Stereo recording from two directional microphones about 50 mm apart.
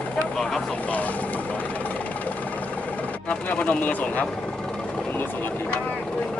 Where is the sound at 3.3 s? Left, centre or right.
Left.